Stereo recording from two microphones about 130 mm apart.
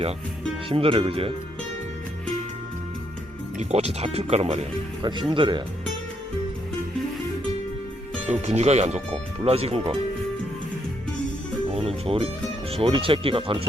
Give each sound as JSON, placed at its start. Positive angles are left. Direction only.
{"t": 0.7, "sound": "speech", "side_deg": -45}
{"t": 3.6, "sound": "speech", "side_deg": -55}
{"t": 5.0, "sound": "speech", "side_deg": -40}
{"t": 8.3, "sound": "speech", "side_deg": -55}
{"t": 11.7, "sound": "music", "side_deg": -50}
{"t": 12.7, "sound": "speech", "side_deg": -45}